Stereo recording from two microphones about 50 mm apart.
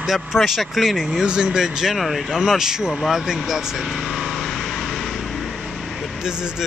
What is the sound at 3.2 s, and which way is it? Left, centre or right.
Vehicle, centre.